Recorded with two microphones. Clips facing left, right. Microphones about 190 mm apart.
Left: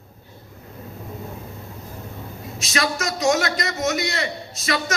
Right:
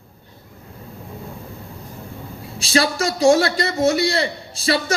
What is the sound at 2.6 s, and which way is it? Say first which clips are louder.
A woman's voice: right 6 dB; 30° right (ahead or behind).